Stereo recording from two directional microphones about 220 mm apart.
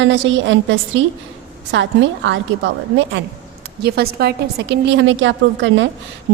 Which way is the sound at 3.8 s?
45° right (ahead or behind).